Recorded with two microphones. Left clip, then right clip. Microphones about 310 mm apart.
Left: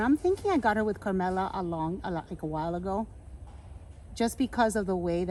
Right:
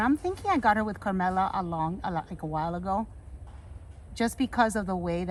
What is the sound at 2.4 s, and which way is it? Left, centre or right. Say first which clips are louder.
Speech: even; right.